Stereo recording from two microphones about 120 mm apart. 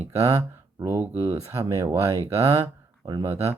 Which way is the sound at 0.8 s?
20° right (ahead or behind).